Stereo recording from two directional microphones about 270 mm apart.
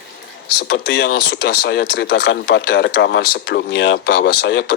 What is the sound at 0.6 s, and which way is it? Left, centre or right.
Speech, left.